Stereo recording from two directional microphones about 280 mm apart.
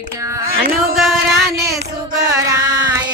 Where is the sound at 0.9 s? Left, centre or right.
Centre.